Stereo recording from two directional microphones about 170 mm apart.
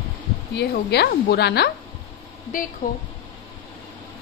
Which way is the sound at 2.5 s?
55° left (ahead or behind).